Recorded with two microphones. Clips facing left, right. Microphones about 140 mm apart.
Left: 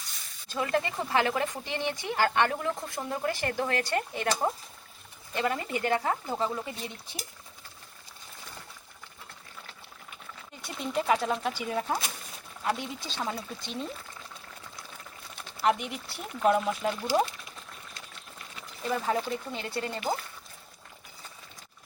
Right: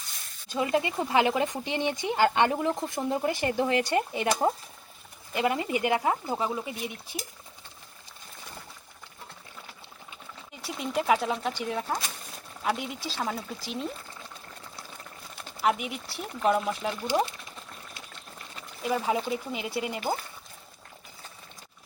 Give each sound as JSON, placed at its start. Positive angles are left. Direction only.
{"t": 0.4, "sound": "speech", "side_deg": -15}
{"t": 10.7, "sound": "speech", "side_deg": -5}
{"t": 15.4, "sound": "speech", "side_deg": -5}
{"t": 18.8, "sound": "speech", "side_deg": -10}